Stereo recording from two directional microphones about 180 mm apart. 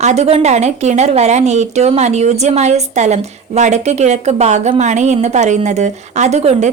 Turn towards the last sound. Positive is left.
turn(degrees=-40)  # may be behind; listen again after turning